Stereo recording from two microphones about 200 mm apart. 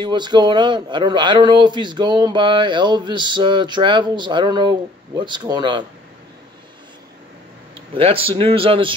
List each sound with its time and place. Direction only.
0.0 s a man's voice: 20° right (ahead or behind)
7.9 s a man's voice: 25° right (ahead or behind)